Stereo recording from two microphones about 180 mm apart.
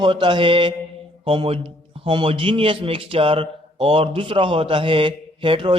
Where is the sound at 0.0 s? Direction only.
25° right (ahead or behind).